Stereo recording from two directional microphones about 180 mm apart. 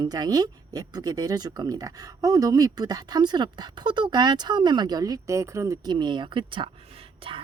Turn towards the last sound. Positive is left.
turn(degrees=-30)  # may be behind; listen again after turning